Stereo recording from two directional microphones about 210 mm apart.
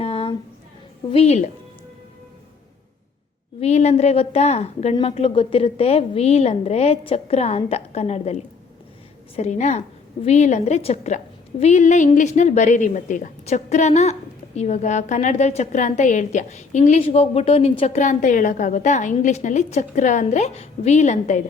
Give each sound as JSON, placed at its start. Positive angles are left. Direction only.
{"t": 0.0, "sound": "a sound", "side_deg": 30}
{"t": 1.1, "sound": "a woman's voice", "side_deg": 30}
{"t": 3.6, "sound": "a woman's voice", "side_deg": 30}